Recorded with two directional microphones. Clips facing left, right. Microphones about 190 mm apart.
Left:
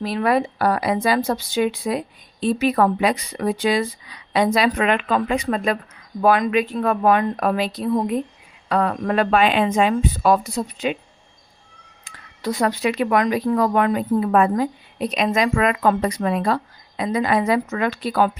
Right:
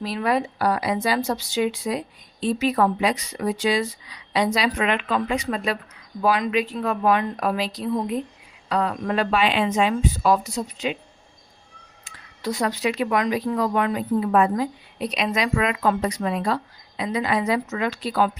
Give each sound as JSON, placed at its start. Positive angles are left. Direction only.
{"t": 0.0, "sound": "speech", "side_deg": 55}
{"t": 12.0, "sound": "speech", "side_deg": 55}